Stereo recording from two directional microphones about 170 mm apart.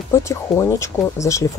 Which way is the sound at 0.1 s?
15° left (ahead or behind).